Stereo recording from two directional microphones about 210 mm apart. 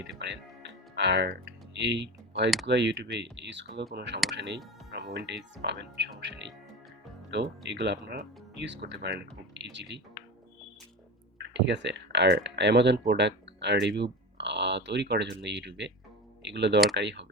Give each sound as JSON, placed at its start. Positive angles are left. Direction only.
{"t": 0.0, "sound": "music", "side_deg": -55}
{"t": 2.6, "sound": "speech", "side_deg": -55}
{"t": 11.3, "sound": "speech", "side_deg": -55}